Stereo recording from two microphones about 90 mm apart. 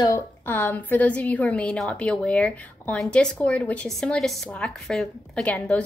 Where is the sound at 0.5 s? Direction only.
20° left (ahead or behind).